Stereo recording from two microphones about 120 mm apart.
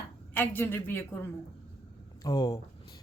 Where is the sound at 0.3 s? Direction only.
15° left (ahead or behind).